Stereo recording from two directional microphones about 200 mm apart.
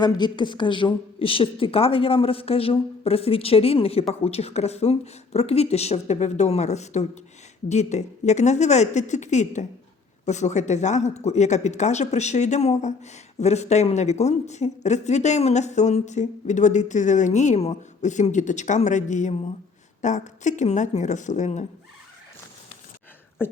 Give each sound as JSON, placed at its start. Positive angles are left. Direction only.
{"t": 0.0, "sound": "a woman's voice", "side_deg": 20}
{"t": 23.4, "sound": "speech", "side_deg": 10}